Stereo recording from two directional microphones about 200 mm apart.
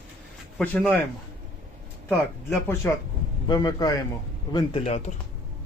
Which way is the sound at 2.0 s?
10° left (ahead or behind).